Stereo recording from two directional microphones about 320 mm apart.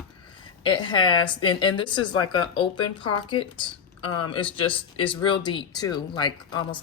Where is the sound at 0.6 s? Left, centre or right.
Centre.